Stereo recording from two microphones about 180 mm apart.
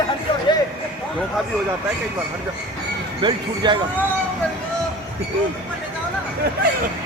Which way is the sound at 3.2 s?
25° right (ahead or behind).